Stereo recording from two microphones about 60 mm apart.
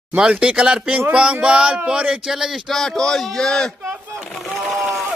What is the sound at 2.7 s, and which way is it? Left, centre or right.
A man's voice, centre.